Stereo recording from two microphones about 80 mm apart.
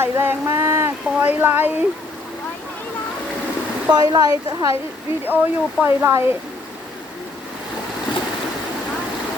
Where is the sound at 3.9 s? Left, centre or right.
Right.